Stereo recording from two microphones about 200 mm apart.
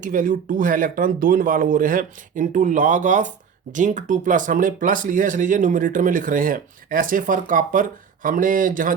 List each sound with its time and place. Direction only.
0.0 s speech: 40° right (ahead or behind)